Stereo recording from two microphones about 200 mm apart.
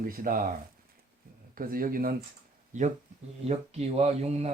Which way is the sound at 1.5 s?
45° right (ahead or behind).